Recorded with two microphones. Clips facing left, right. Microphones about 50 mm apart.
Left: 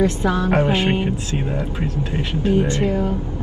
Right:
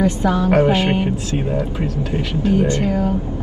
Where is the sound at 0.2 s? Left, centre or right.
Left.